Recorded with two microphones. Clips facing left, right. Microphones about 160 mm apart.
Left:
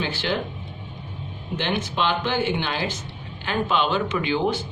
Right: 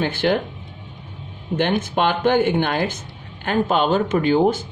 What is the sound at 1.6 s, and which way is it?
Speech, 50° right (ahead or behind).